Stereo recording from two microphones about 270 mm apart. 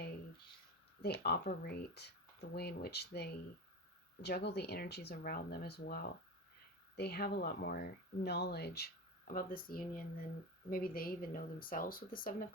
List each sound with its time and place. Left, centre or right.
1.0 s speech: left